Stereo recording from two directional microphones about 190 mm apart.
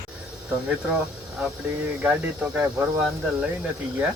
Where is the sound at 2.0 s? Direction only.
5° right (ahead or behind).